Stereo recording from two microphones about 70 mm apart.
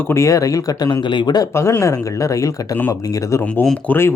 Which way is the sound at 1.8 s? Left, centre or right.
Left.